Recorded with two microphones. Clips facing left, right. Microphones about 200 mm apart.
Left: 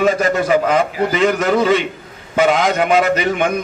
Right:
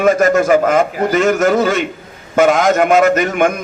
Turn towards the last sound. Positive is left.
turn(degrees=-45)  # may be behind; listen again after turning